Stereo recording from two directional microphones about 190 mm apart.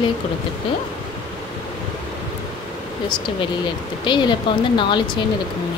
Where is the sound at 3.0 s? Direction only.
25° left (ahead or behind).